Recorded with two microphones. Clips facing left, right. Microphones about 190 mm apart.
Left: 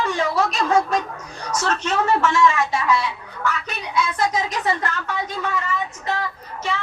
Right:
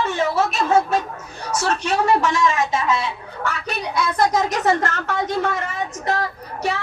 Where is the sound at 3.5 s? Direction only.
35° right (ahead or behind).